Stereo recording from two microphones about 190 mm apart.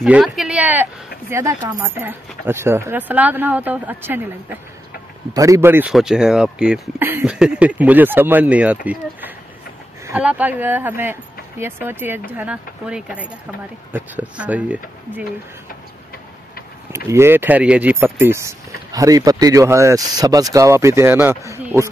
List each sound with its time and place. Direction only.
0.0 s speech: centre (ahead or behind)
10.0 s speech: 10° right (ahead or behind)
16.9 s speech: 15° right (ahead or behind)